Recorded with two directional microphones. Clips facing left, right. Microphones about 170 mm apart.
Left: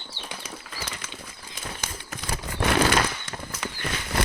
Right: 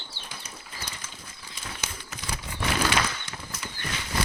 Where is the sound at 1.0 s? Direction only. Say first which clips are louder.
Left 4 dB; 90° left.